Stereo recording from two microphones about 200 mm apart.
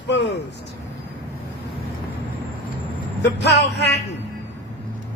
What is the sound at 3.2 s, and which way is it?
Speech, 60° left (ahead or behind).